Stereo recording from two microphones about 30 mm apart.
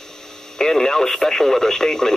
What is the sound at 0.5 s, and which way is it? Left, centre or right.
Speech, centre.